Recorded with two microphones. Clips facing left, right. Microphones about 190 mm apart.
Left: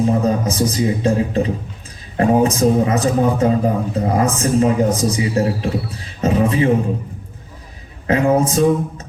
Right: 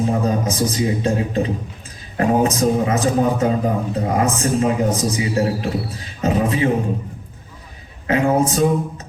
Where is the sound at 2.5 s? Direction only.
35° left (ahead or behind).